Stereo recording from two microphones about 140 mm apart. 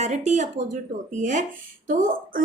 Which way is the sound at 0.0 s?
55° right (ahead or behind).